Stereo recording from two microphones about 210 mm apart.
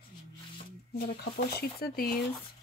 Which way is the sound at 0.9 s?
50° left (ahead or behind).